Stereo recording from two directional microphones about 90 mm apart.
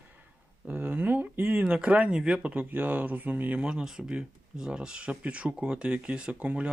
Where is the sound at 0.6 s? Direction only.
15° right (ahead or behind).